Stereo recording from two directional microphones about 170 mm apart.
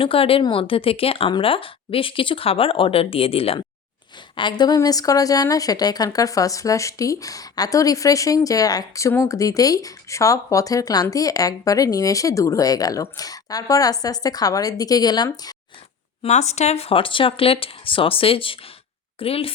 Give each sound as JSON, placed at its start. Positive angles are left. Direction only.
{"t": 0.0, "sound": "speech", "side_deg": 35}
{"t": 16.2, "sound": "speech", "side_deg": 40}